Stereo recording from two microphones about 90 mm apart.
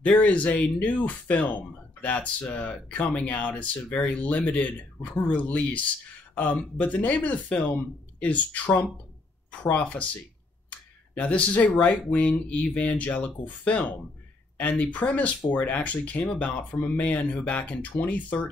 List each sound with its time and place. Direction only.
0.0 s speech: 15° left (ahead or behind)
10.7 s a sound: 15° left (ahead or behind)
12.1 s speech: 15° left (ahead or behind)